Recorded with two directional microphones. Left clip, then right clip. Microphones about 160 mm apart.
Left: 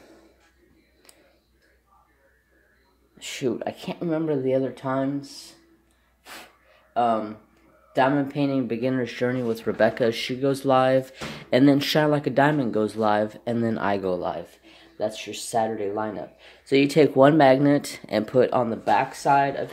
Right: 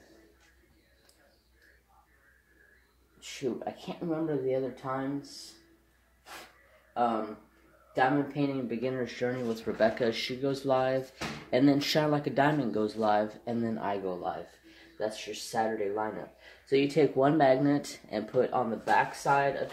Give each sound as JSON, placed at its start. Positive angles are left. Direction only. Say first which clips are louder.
{"t": 3.2, "sound": "speech", "louder": "left 8 dB", "side_deg": 60}
{"t": 7.9, "sound": "speech", "louder": "left 6 dB", "side_deg": 60}
{"t": 15.0, "sound": "speech", "louder": "left 6 dB", "side_deg": 85}